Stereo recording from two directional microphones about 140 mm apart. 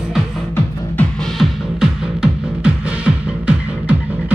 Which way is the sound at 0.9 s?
Centre (ahead or behind).